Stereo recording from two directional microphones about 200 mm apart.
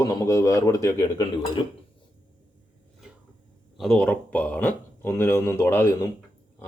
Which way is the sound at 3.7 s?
Centre (ahead or behind).